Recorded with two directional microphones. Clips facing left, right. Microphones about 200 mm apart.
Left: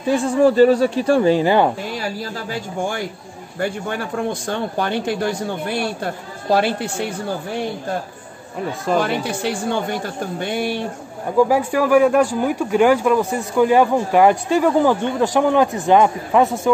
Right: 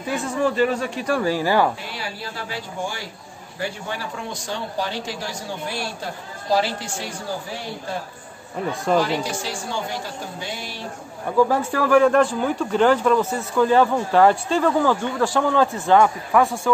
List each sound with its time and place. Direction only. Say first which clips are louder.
0.1 s speech: left 8 dB; 35° left (ahead or behind)
2.0 s a man's voice: left 6 dB; 45° left (ahead or behind)
9.0 s a man's voice: left 3 dB; 60° left (ahead or behind)
11.3 s speech: left 3 dB; 15° left (ahead or behind)